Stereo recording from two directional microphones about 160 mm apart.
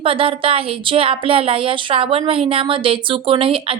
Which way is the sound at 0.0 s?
35° right (ahead or behind).